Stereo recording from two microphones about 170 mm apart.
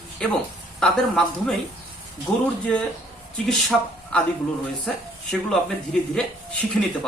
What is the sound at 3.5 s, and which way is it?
A woman's voice, 5° left (ahead or behind).